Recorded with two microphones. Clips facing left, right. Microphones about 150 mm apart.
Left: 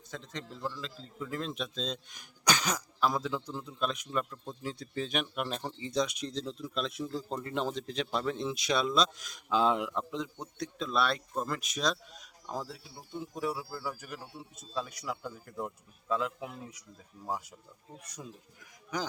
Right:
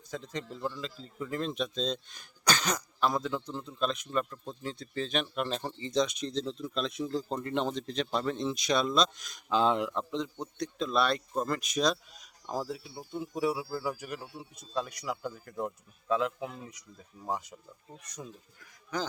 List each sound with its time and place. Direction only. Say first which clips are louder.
0.1 s speech: right 4 dB; centre (ahead or behind)
15.1 s speech: right 3 dB; 10° right (ahead or behind); by 19.0 s 15° left (ahead or behind)